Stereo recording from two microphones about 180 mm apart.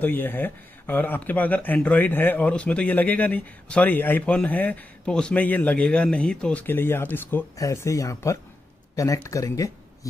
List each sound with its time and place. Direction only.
0.0 s speech: 10° left (ahead or behind)